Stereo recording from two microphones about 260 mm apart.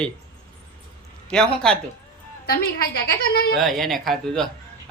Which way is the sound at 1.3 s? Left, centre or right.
Centre.